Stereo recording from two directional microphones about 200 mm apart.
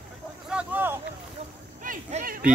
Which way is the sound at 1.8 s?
40° right (ahead or behind).